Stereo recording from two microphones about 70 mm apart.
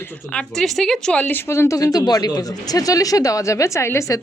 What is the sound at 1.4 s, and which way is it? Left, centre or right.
Speech, left.